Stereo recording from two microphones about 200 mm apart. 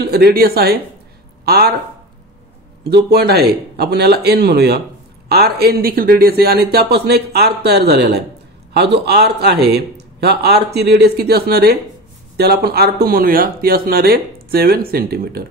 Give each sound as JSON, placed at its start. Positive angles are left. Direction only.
{"t": 0.0, "sound": "speech", "side_deg": -50}
{"t": 3.1, "sound": "a man's voice", "side_deg": -55}